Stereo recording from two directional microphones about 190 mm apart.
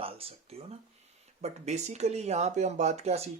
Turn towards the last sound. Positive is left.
turn(degrees=-35)  # may be behind; listen again after turning